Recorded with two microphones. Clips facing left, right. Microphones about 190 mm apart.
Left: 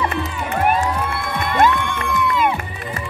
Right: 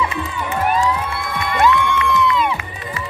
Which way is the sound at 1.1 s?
50° left (ahead or behind).